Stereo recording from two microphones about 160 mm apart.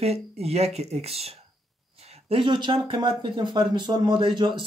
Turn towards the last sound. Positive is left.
turn(degrees=-30)  # may be behind; listen again after turning